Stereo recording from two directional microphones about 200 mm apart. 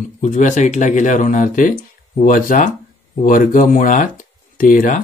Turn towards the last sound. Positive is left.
turn(degrees=40)  # may be behind; listen again after turning